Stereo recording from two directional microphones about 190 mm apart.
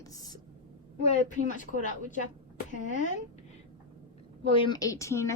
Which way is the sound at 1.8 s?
40° left (ahead or behind).